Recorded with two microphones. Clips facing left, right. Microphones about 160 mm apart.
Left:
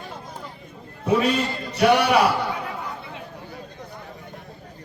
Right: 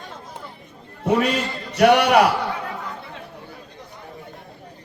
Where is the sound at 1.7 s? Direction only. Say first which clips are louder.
Right 3 dB; 65° right (ahead or behind).